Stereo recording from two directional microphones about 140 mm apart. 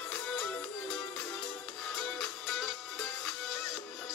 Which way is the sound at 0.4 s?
5° left (ahead or behind).